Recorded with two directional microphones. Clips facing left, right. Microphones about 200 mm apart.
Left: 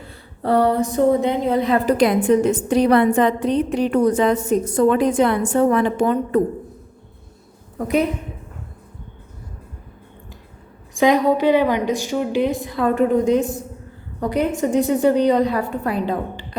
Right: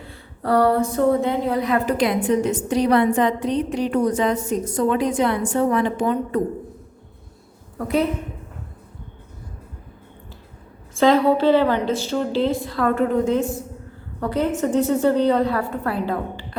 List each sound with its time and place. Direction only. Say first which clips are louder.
0.4 s a woman's voice: left 1 dB; 20° left (ahead or behind)
2.0 s a woman's voice: left 4 dB; 50° left (ahead or behind)
7.8 s a woman's voice: left 2 dB; 15° left (ahead or behind)
10.9 s a woman's voice: even; 15° left (ahead or behind)